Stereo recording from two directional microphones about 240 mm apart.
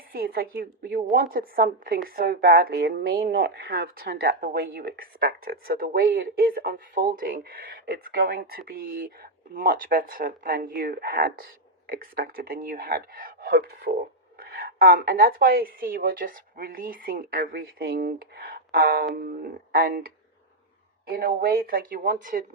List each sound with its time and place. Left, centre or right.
0.1 s a woman's voice: right